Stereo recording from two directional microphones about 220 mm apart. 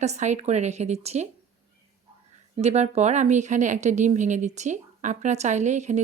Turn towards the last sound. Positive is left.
turn(degrees=-30)  # may be behind; listen again after turning